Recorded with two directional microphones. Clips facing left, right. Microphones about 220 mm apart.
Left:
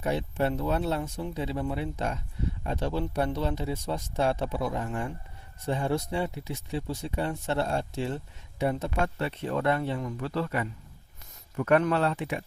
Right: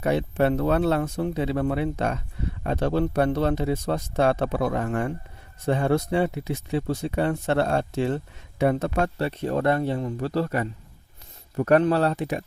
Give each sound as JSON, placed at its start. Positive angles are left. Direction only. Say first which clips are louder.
{"t": 0.0, "sound": "speech", "louder": "right 6 dB", "side_deg": -70}
{"t": 9.1, "sound": "speech", "louder": "right 5 dB", "side_deg": -40}